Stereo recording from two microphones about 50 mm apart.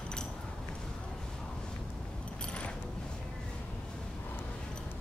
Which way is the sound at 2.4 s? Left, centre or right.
Left.